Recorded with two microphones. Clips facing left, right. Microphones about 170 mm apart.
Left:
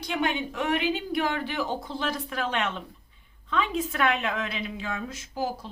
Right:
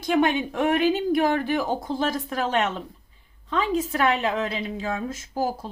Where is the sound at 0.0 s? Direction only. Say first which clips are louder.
Right 7 dB; 45° right (ahead or behind).